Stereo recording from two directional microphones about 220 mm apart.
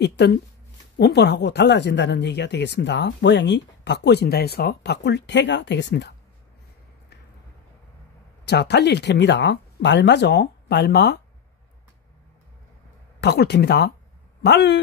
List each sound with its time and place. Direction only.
0.0 s speech: 50° left (ahead or behind)
8.5 s speech: 50° left (ahead or behind)
13.2 s speech: 50° left (ahead or behind)